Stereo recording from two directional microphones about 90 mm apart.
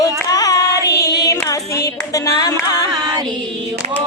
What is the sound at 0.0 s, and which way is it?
Hands, 40° left (ahead or behind).